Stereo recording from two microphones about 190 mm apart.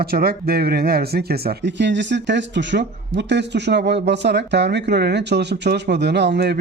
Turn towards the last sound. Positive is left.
turn(degrees=-60)  # may be behind; listen again after turning